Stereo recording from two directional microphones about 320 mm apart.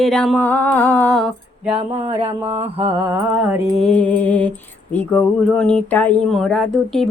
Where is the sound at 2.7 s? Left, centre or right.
Centre.